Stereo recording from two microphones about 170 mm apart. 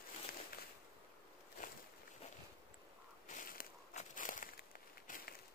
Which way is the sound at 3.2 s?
50° left (ahead or behind).